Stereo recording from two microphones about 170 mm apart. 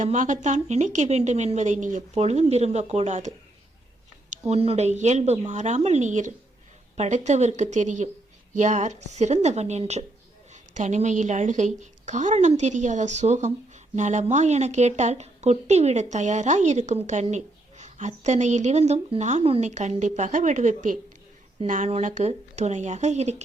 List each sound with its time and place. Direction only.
0.0 s a woman's voice: 45° right (ahead or behind)